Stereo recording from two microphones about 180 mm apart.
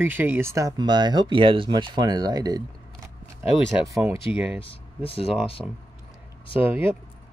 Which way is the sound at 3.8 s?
15° right (ahead or behind).